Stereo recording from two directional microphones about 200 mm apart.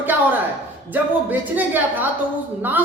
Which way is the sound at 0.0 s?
10° right (ahead or behind).